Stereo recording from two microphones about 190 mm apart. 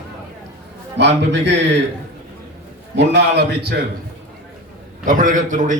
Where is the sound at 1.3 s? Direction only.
70° right (ahead or behind).